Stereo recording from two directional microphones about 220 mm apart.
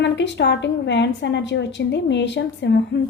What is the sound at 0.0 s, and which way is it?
A woman's voice, 50° left (ahead or behind).